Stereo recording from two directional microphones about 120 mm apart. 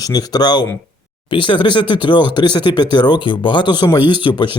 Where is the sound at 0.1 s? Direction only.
35° left (ahead or behind).